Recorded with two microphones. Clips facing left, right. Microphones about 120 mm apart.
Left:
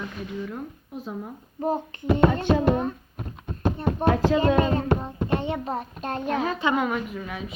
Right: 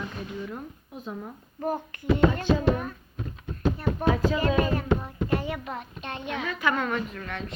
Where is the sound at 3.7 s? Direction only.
25° left (ahead or behind).